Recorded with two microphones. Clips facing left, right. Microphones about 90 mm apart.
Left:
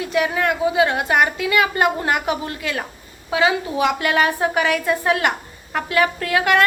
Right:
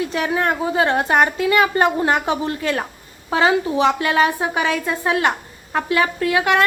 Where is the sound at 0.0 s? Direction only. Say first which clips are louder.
Even; 30° right (ahead or behind).